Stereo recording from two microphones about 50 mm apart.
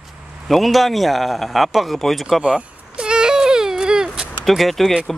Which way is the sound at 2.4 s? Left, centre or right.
Right.